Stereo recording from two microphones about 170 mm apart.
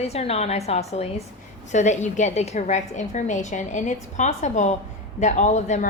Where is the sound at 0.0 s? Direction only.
35° left (ahead or behind).